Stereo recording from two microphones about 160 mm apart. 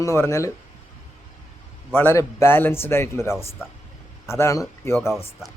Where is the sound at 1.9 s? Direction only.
15° left (ahead or behind).